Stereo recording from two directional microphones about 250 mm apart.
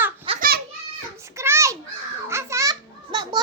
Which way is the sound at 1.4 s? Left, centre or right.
Centre.